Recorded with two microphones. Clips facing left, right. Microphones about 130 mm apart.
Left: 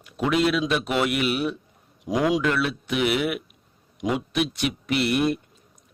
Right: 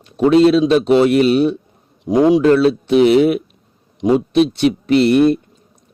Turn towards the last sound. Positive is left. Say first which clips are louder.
# right 11 dB
turn(degrees=-30)  # may be behind; listen again after turning